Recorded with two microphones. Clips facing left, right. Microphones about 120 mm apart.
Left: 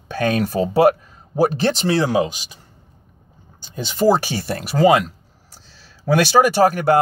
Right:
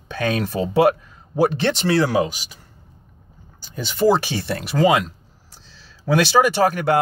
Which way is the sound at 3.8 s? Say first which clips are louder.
Left 1 dB; 35° left (ahead or behind).